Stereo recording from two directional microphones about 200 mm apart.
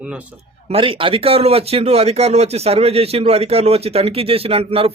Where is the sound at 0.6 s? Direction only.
25° right (ahead or behind).